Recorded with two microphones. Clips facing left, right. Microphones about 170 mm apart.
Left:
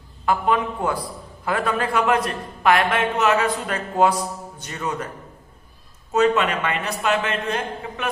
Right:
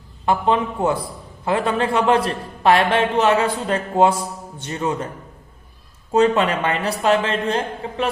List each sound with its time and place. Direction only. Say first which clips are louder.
0.3 s a man's voice: right 2 dB; 25° right (ahead or behind)
6.1 s a man's voice: right 2 dB; 30° right (ahead or behind)